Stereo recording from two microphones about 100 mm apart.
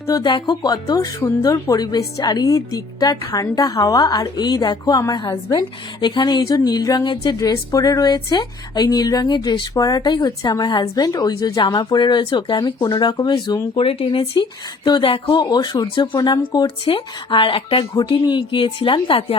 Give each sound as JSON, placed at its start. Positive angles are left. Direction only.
{"t": 0.2, "sound": "a woman's voice", "side_deg": 50}
{"t": 13.7, "sound": "speech", "side_deg": 60}
{"t": 16.6, "sound": "speech", "side_deg": 65}